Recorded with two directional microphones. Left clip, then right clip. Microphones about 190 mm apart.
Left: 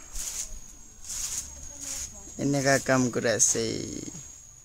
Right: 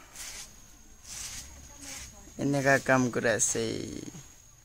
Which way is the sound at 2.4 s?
Centre (ahead or behind).